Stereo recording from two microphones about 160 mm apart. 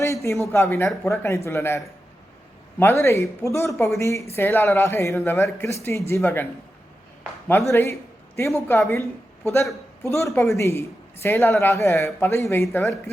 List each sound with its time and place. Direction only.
0.0 s a man's voice: 20° left (ahead or behind)